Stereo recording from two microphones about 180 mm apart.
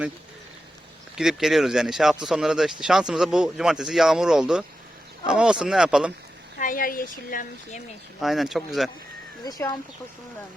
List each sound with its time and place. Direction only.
1.1 s speech: 5° right (ahead or behind)
6.6 s speech: 50° left (ahead or behind)
8.2 s speech: centre (ahead or behind)
9.4 s speech: 20° left (ahead or behind)